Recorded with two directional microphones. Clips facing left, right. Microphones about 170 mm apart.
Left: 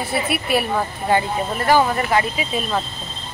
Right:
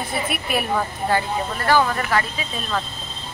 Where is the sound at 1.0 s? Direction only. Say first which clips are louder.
Left 4 dB; 15° left (ahead or behind).